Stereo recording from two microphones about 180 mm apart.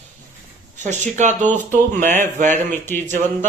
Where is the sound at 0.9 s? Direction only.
40° right (ahead or behind).